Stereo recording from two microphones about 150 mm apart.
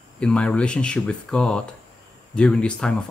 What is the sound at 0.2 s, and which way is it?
Speech, 5° left (ahead or behind).